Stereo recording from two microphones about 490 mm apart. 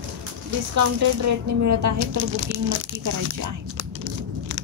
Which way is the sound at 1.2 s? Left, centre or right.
Right.